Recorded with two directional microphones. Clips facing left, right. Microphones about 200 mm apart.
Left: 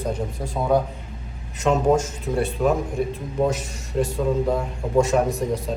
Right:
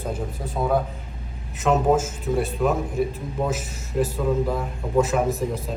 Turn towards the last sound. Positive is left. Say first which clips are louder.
# left 2 dB
turn(degrees=0)  # may be behind; listen again after turning